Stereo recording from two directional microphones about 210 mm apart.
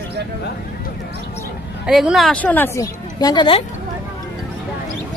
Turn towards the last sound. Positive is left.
turn(degrees=25)  # may be behind; listen again after turning